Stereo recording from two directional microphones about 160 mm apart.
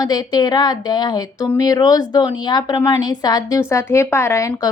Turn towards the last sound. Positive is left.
turn(degrees=20)  # may be behind; listen again after turning